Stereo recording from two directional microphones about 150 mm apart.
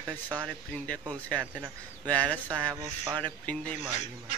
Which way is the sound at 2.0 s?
10° left (ahead or behind).